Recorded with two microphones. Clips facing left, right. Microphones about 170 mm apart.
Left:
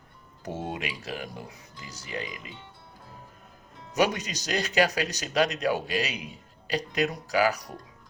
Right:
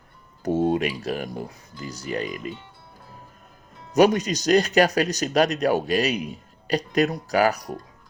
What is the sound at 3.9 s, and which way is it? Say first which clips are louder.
Speech: right 8 dB; 40° right (ahead or behind).